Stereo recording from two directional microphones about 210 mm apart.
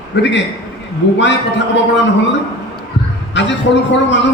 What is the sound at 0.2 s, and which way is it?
A man's voice, 55° left (ahead or behind).